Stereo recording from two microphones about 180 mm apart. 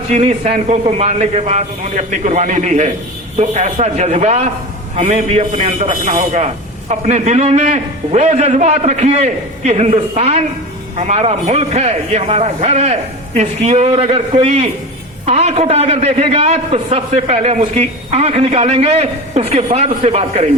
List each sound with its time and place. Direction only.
0.1 s a man's voice: 35° right (ahead or behind)